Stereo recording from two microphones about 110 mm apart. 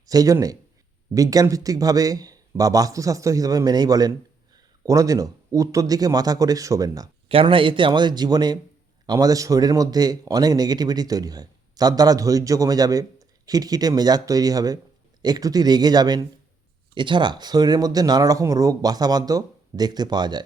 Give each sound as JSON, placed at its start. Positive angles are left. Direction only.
{"t": 0.0, "sound": "a man's voice", "side_deg": -35}
{"t": 7.3, "sound": "a man's voice", "side_deg": -55}